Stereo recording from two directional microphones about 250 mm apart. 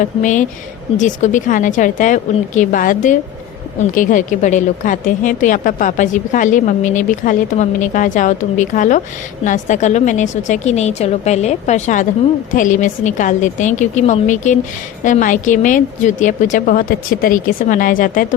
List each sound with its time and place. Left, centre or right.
0.2 s a woman's voice: left